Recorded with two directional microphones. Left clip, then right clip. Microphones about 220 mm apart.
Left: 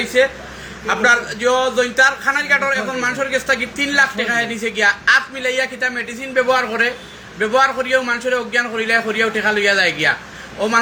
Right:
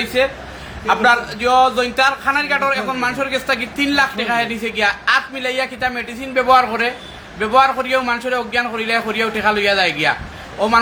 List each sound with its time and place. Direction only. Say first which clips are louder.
0.1 s a man's voice: left 3 dB; 10° right (ahead or behind)